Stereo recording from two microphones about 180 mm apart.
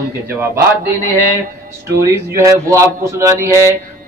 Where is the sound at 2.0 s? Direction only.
15° right (ahead or behind).